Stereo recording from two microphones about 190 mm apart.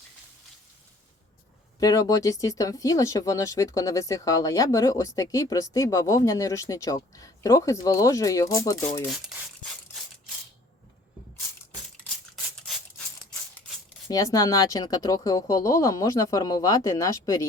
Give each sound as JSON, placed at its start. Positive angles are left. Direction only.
{"t": 1.8, "sound": "speech", "side_deg": 20}
{"t": 9.0, "sound": "rub", "side_deg": 0}
{"t": 14.1, "sound": "speech", "side_deg": 20}